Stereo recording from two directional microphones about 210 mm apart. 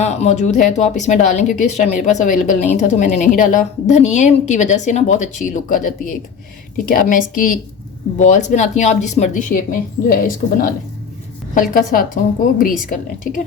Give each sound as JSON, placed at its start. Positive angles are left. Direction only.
{"t": 0.0, "sound": "speech", "side_deg": 30}